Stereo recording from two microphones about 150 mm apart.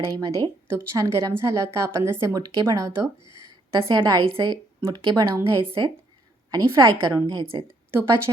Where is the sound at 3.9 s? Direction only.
30° right (ahead or behind).